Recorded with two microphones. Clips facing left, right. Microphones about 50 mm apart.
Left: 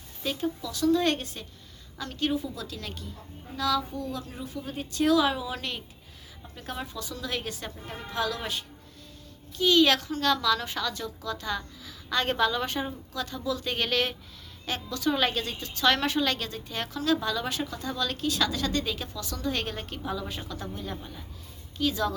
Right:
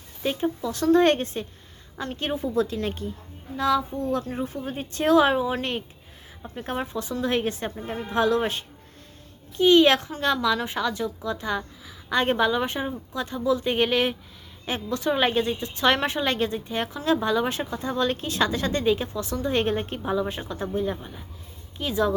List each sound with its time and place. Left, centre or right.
0.2 s a woman's voice: right